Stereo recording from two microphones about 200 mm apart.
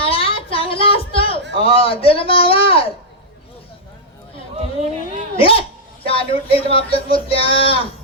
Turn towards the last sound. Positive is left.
turn(degrees=30)  # may be behind; listen again after turning